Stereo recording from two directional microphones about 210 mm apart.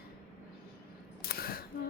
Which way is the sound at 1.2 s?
45° left (ahead or behind).